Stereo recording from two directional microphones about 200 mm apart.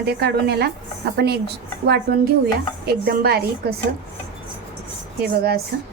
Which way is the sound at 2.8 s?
50° right (ahead or behind).